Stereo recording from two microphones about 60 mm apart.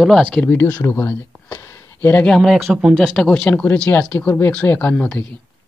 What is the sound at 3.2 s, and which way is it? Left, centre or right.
Speech, centre.